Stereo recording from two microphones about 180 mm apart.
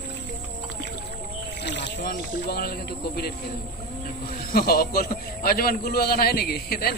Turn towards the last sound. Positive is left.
turn(degrees=60)  # may be behind; listen again after turning